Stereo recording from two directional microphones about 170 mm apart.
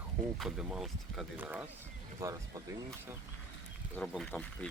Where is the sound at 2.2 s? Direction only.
20° right (ahead or behind).